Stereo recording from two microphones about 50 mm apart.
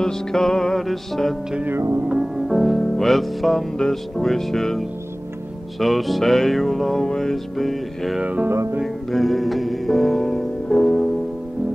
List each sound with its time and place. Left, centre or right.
0.0 s music: centre
8.2 s music: right
8.5 s music: right
9.1 s music: centre